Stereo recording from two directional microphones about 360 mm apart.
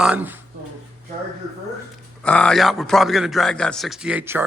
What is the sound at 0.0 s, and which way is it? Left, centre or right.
Speech, centre.